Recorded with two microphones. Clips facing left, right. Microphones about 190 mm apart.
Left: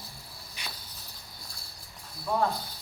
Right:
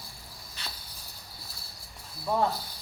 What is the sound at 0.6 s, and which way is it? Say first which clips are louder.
Cricket: even; 10° left (ahead or behind).